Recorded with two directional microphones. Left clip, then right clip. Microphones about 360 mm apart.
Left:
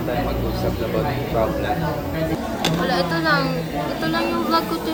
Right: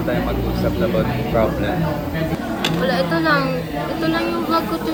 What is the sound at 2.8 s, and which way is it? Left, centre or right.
Speech, centre.